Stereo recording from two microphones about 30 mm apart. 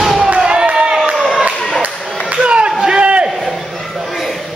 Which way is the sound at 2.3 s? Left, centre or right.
Right.